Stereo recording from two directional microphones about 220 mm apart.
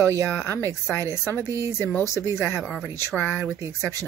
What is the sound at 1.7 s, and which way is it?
Speech, 10° left (ahead or behind).